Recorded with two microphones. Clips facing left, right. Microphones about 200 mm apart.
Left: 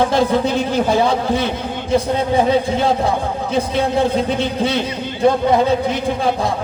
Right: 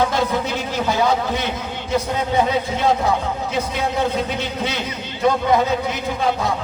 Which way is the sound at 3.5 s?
30° left (ahead or behind).